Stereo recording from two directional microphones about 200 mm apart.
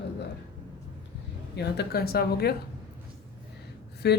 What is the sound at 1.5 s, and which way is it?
Speech, 55° left (ahead or behind).